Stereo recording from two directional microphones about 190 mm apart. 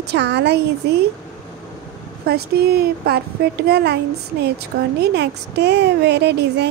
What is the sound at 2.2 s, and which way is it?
Speech, 55° right (ahead or behind).